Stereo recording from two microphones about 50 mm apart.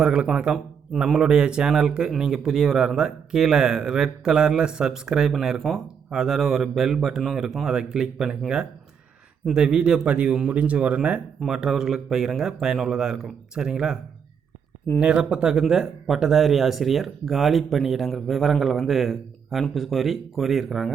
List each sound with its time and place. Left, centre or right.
0.0 s speech: centre
9.5 s speech: centre
11.4 s speech: centre